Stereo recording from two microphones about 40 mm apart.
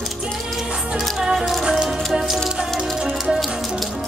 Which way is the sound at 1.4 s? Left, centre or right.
Centre.